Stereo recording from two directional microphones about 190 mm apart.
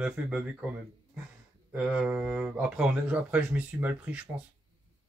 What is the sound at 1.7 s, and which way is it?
Speech, 5° right (ahead or behind).